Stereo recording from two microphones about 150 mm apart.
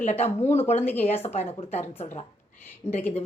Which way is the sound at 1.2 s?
45° left (ahead or behind).